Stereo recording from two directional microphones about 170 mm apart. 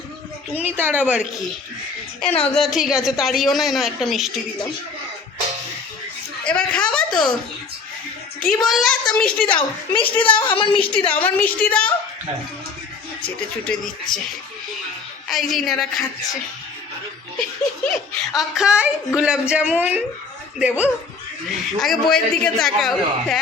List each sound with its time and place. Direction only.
0.8 s a woman's voice: 10° right (ahead or behind)
2.2 s a woman's voice: 5° left (ahead or behind)
6.4 s speech: 5° left (ahead or behind)
8.4 s a woman's voice: 5° left (ahead or behind)
9.6 s a woman's voice: 30° left (ahead or behind)
11.1 s a woman's voice: 10° left (ahead or behind)
15.3 s a woman's voice: centre (ahead or behind)
18.3 s a woman's voice: centre (ahead or behind)